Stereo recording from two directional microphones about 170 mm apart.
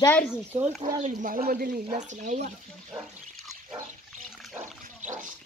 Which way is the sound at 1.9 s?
45° right (ahead or behind).